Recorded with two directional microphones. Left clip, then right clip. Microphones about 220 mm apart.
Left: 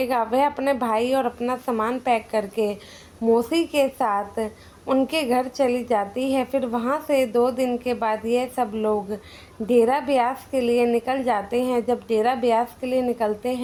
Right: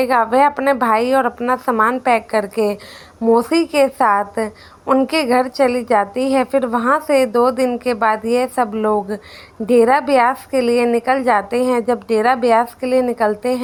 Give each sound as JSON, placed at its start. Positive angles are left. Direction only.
{"t": 0.0, "sound": "a woman's voice", "side_deg": -20}